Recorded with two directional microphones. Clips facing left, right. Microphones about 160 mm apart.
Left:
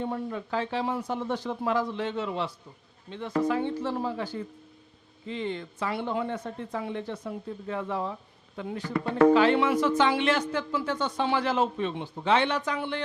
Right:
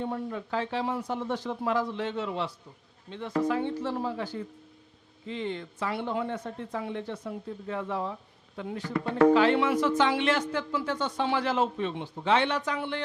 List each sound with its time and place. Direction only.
0.0 s speech: 20° left (ahead or behind)
4.2 s speech: 10° left (ahead or behind)